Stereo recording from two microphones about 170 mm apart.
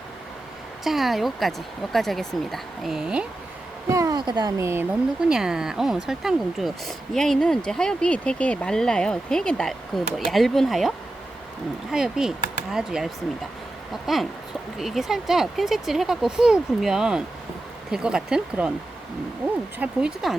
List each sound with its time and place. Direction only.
0.9 s speech: centre (ahead or behind)
3.8 s speech: 20° right (ahead or behind)
5.3 s speech: 5° right (ahead or behind)
19.8 s speech: 5° right (ahead or behind)